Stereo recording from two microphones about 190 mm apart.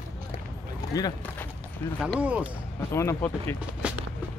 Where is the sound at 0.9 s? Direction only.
20° left (ahead or behind).